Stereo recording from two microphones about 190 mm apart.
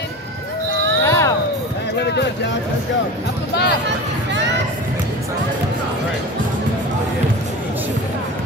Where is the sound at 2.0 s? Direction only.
65° left (ahead or behind).